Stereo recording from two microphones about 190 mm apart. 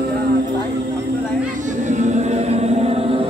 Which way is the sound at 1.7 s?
40° right (ahead or behind).